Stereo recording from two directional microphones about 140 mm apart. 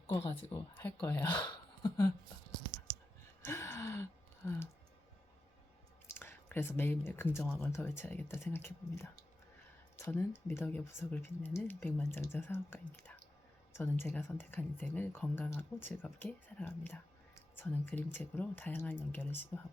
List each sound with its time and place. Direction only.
0.5 s speech: 15° left (ahead or behind)
1.4 s a sound: 30° left (ahead or behind)
3.4 s gasp: 20° left (ahead or behind)
4.4 s speech: 15° left (ahead or behind)
6.1 s speech: 15° left (ahead or behind)